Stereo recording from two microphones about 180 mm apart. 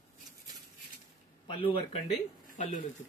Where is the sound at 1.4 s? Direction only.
30° left (ahead or behind).